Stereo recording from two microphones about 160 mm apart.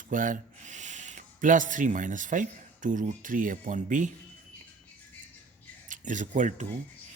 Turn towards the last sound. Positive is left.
turn(degrees=-50)  # may be behind; listen again after turning